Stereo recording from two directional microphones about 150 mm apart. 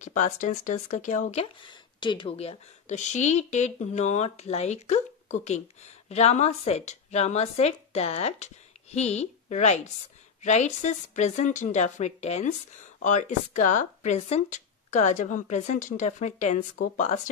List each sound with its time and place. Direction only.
0.0 s speech: 55° left (ahead or behind)
1.4 s speech: 30° left (ahead or behind); by 17.3 s 55° left (ahead or behind)